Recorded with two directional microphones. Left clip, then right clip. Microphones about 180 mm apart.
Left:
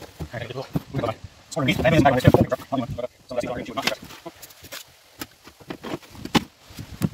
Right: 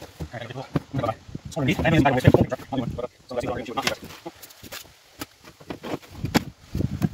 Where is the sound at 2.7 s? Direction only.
15° right (ahead or behind).